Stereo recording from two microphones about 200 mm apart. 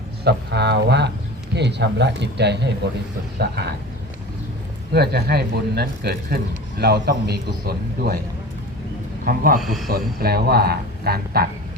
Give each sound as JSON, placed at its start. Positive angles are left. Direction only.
{"t": 0.3, "sound": "speech", "side_deg": -60}
{"t": 4.9, "sound": "speech", "side_deg": -55}
{"t": 9.2, "sound": "speech", "side_deg": -45}
{"t": 9.6, "sound": "speech", "side_deg": 0}
{"t": 9.9, "sound": "speech", "side_deg": -50}